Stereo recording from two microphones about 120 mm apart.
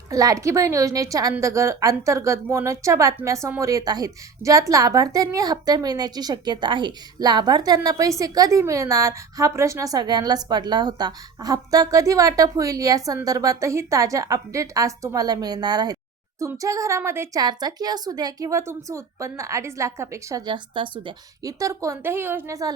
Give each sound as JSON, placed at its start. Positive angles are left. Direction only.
{"t": 0.1, "sound": "a woman's voice", "side_deg": -30}
{"t": 17.4, "sound": "a woman's voice", "side_deg": -35}
{"t": 20.4, "sound": "speech", "side_deg": -40}
{"t": 21.4, "sound": "a woman's voice", "side_deg": -25}